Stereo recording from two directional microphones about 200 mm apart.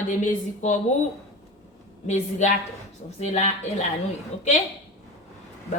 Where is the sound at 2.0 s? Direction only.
35° left (ahead or behind).